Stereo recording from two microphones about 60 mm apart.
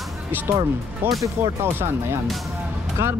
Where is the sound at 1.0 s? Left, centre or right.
Right.